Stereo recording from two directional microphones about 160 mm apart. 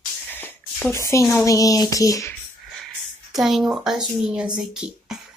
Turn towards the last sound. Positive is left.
turn(degrees=-5)  # may be behind; listen again after turning